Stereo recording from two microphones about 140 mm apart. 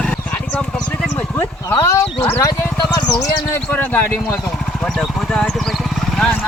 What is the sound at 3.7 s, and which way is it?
Speech, 10° left (ahead or behind).